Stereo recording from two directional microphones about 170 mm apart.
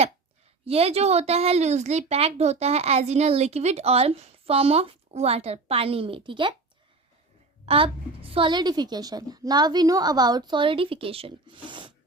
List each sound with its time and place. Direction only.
0.6 s a woman's voice: 35° right (ahead or behind)
7.6 s a woman's voice: 35° right (ahead or behind)